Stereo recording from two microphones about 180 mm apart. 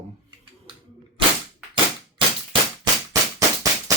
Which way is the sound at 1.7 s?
25° right (ahead or behind).